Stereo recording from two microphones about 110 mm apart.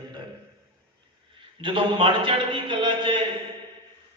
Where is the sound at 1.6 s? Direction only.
55° right (ahead or behind).